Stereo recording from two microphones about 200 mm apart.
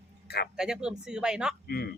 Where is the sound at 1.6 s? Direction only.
50° left (ahead or behind).